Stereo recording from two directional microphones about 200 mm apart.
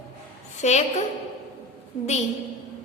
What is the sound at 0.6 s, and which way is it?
Speech, 35° left (ahead or behind).